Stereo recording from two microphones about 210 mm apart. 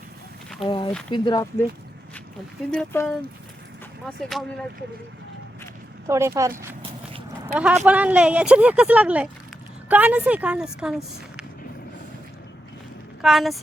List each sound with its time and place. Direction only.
0.6 s speech: 25° left (ahead or behind)
2.6 s speech: 10° left (ahead or behind)
6.1 s a woman's voice: 15° right (ahead or behind)
13.2 s speech: centre (ahead or behind)